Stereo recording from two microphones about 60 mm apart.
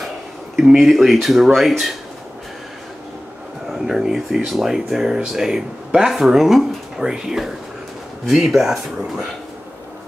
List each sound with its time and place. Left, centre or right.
0.7 s speech: centre
3.7 s speech: centre